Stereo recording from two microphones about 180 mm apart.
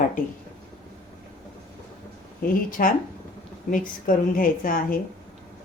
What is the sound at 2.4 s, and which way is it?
Speech, 55° left (ahead or behind).